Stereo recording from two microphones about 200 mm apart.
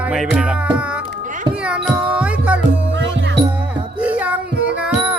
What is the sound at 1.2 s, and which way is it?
Children playing, 40° right (ahead or behind).